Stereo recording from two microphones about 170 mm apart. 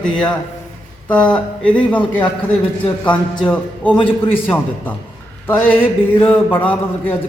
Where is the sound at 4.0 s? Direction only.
30° left (ahead or behind).